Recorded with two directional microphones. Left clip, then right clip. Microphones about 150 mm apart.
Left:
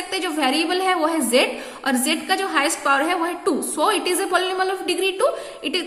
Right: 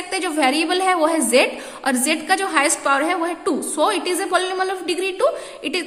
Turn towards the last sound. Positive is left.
turn(degrees=-15)  # may be behind; listen again after turning